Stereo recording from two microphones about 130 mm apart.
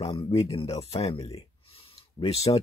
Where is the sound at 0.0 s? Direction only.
45° left (ahead or behind).